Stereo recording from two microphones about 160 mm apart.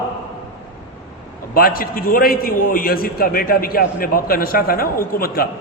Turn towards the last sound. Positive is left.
turn(degrees=70)  # may be behind; listen again after turning